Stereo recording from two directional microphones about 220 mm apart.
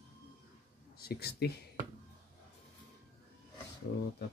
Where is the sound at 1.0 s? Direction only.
45° left (ahead or behind).